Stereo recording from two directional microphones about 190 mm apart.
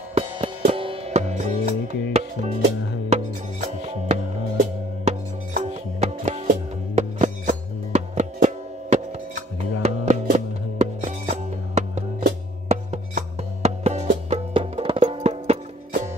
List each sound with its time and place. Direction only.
0.1 s music: 30° right (ahead or behind)
3.6 s music: 35° right (ahead or behind)